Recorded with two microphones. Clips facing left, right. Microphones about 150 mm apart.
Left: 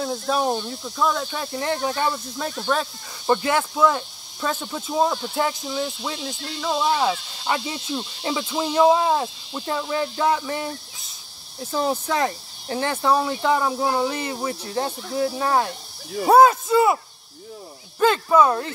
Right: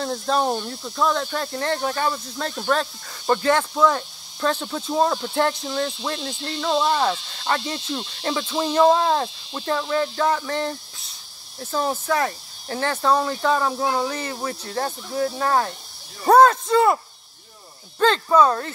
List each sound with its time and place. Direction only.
0.0 s speech: 5° left (ahead or behind)
11.7 s speech: 15° left (ahead or behind)